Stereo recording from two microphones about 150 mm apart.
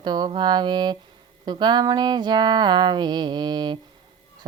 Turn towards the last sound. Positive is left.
turn(degrees=-30)  # may be behind; listen again after turning